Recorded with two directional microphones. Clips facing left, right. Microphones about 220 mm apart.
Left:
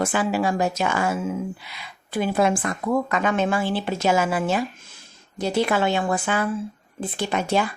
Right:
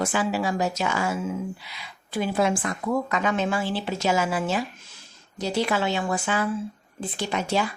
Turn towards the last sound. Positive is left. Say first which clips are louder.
# left 3 dB
turn(degrees=55)  # may be behind; listen again after turning